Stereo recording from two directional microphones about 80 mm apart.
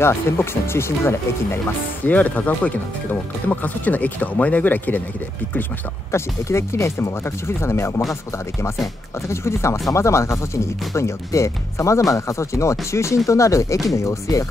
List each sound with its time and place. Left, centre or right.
0.0 s speech: left
2.0 s speech: centre
6.1 s speech: left
9.3 s speech: left